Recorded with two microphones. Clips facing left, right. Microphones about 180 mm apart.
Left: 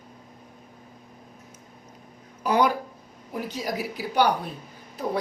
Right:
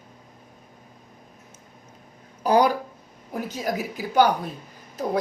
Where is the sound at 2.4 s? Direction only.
35° right (ahead or behind).